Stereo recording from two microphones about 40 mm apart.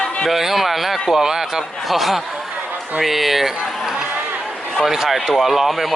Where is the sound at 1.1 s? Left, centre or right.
Centre.